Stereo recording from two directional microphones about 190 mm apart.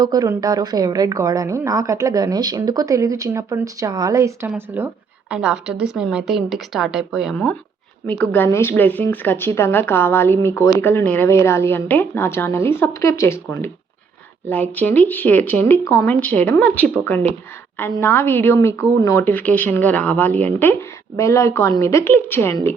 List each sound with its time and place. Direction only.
0.0 s a woman's voice: 20° right (ahead or behind); by 22.7 s 10° left (ahead or behind)